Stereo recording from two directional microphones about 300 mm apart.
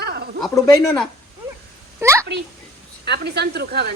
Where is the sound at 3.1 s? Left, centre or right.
Right.